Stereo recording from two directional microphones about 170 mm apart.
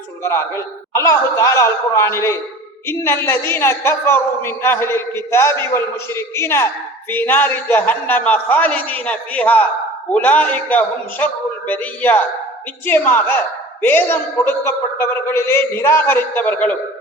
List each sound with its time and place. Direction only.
0.2 s a woman's voice: 15° left (ahead or behind)